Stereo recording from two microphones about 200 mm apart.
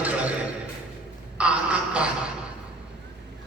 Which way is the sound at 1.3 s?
5° right (ahead or behind).